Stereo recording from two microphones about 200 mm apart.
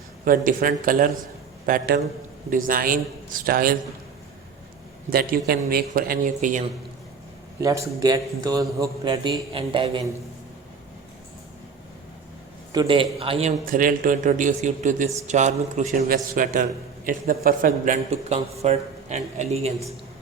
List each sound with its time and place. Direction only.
0.3 s speech: 45° right (ahead or behind)
5.1 s speech: 45° right (ahead or behind)
7.6 s a man's voice: 15° right (ahead or behind)
12.7 s a man's voice: 25° right (ahead or behind)
13.7 s a man's voice: 45° right (ahead or behind)